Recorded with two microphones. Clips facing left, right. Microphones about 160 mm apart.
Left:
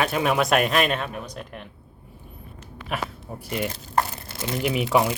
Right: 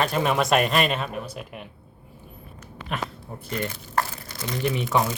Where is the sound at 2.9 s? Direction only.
5° left (ahead or behind).